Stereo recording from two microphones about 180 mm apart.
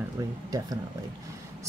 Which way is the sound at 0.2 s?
15° right (ahead or behind).